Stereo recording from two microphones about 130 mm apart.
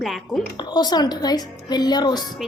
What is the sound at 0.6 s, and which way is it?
A woman's voice, 35° left (ahead or behind).